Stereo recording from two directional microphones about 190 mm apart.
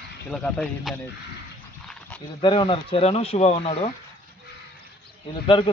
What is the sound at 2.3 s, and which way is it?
Speech, 25° left (ahead or behind).